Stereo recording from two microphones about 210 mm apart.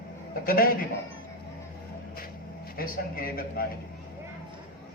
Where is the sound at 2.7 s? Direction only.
45° left (ahead or behind).